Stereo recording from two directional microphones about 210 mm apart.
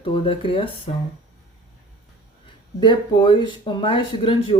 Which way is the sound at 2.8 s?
20° left (ahead or behind).